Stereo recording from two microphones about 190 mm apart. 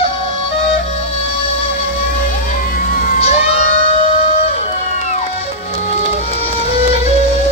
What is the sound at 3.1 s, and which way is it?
Crowd, 30° left (ahead or behind).